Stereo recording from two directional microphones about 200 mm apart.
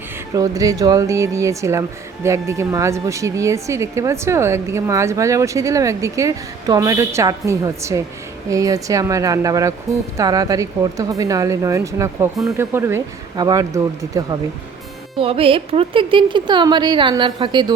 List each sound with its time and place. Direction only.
0.3 s speech: 15° right (ahead or behind)
15.2 s a woman's voice: 30° right (ahead or behind)